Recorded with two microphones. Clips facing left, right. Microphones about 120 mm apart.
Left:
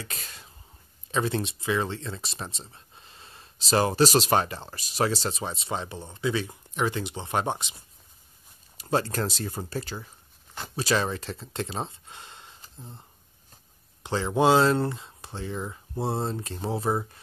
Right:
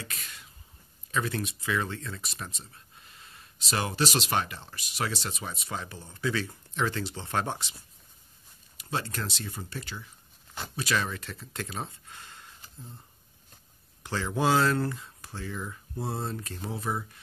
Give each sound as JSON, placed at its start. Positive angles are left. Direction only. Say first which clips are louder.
{"t": 0.0, "sound": "a sound", "louder": "left 2 dB", "side_deg": 30}
{"t": 1.1, "sound": "speech", "louder": "left 4 dB", "side_deg": 25}
{"t": 8.7, "sound": "speech", "louder": "left 7 dB", "side_deg": 40}
{"t": 14.0, "sound": "speech", "louder": "left 5 dB", "side_deg": 20}